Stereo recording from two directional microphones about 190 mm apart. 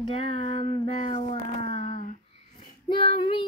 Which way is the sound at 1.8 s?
40° left (ahead or behind).